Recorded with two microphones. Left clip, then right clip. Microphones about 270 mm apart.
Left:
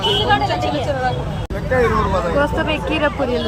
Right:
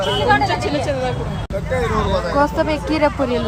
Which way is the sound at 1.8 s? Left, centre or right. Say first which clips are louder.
Left 3 dB; centre.